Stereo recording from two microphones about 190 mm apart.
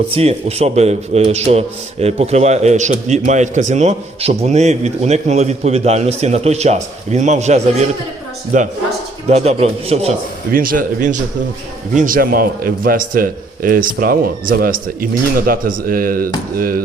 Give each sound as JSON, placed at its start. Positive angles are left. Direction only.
{"t": 0.1, "sound": "a man's voice", "side_deg": -30}
{"t": 10.5, "sound": "a man's voice", "side_deg": -45}